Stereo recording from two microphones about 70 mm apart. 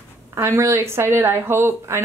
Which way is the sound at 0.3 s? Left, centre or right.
Right.